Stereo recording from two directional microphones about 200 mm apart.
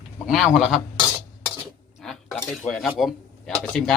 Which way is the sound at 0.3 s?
Centre (ahead or behind).